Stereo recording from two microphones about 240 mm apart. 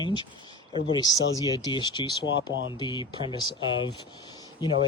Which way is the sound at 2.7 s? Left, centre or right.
Centre.